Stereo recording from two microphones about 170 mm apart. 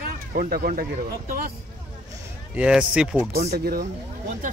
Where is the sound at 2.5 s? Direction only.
5° right (ahead or behind).